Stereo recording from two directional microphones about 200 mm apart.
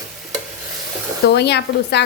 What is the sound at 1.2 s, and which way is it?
Speech, 55° left (ahead or behind).